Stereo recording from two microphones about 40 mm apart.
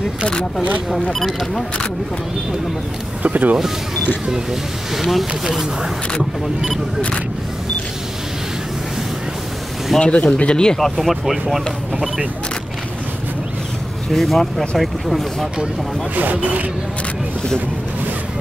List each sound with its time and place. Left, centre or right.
1.2 s speech: centre
3.2 s speech: right
3.5 s speech: centre
9.9 s speech: left
10.8 s speech: centre
14.1 s speech: centre
16.2 s speech: right